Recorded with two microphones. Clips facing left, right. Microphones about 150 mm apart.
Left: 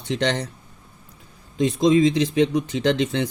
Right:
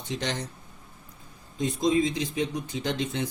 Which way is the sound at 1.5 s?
90° left.